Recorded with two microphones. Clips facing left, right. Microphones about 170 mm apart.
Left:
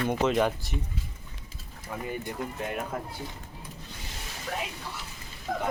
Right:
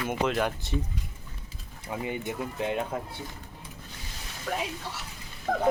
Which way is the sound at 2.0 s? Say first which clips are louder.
Right 1 dB; 20° right (ahead or behind).